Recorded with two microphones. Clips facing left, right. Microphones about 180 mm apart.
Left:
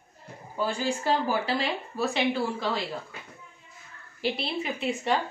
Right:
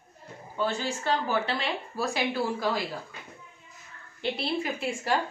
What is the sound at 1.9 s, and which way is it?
Speech, 5° right (ahead or behind).